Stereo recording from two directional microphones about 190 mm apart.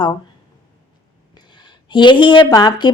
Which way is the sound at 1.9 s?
25° left (ahead or behind).